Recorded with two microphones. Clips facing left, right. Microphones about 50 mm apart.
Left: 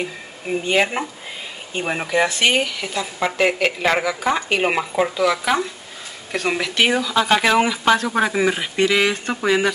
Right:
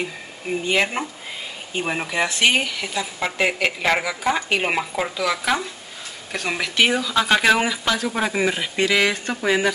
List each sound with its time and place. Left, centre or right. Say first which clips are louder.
0.5 s a woman's voice: left 2 dB; centre